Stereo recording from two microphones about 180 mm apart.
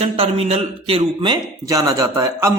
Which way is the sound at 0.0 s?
35° right (ahead or behind).